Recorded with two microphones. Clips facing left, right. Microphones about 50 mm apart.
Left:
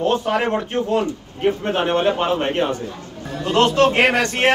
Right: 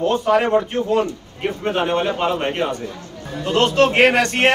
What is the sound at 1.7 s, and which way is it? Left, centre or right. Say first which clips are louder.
Speech: right 2 dB; left.